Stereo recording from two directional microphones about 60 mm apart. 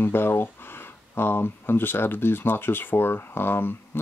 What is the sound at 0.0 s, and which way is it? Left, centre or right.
Speech, left.